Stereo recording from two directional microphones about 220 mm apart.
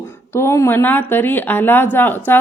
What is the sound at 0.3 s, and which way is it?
A woman's voice, 10° left (ahead or behind).